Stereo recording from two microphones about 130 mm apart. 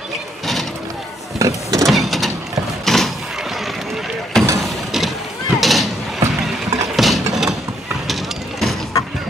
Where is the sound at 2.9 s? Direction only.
Centre (ahead or behind).